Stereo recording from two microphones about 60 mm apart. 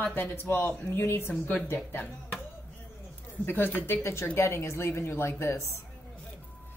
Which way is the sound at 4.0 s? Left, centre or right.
Left.